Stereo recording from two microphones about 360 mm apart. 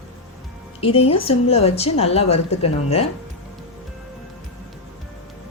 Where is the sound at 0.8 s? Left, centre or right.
Centre.